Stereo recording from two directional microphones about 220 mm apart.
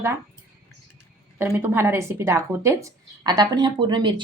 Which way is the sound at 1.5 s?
10° right (ahead or behind).